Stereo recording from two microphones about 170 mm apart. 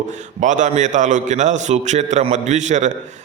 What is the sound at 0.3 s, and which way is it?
A man's voice, 45° right (ahead or behind).